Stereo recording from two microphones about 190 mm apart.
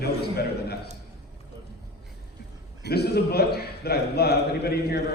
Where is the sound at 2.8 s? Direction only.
60° left (ahead or behind).